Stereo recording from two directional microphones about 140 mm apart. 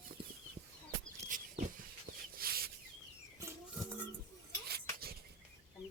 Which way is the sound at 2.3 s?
90° right.